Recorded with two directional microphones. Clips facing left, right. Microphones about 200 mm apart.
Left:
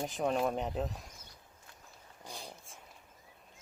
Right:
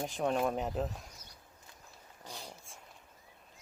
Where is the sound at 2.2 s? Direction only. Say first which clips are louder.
Even; 15° left (ahead or behind).